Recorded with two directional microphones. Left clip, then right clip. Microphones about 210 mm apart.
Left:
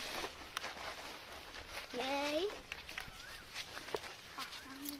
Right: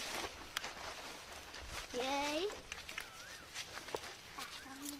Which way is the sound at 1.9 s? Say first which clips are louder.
Right 1 dB; 15° left (ahead or behind).